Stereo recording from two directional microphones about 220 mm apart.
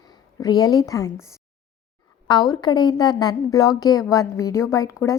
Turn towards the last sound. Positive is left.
turn(degrees=15)  # may be behind; listen again after turning